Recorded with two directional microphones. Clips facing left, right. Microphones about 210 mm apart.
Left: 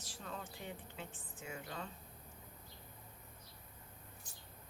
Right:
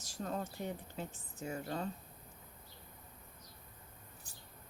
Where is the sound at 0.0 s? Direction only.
45° right (ahead or behind).